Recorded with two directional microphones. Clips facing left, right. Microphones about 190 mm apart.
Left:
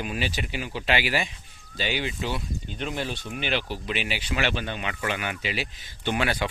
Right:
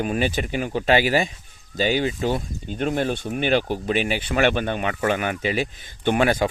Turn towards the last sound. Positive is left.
turn(degrees=-45)  # may be behind; listen again after turning